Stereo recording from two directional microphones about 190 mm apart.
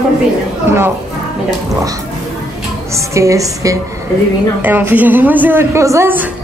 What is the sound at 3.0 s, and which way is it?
A man's voice, 15° right (ahead or behind).